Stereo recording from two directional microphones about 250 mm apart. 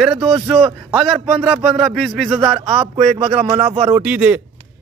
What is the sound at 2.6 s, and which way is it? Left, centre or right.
A man's voice, centre.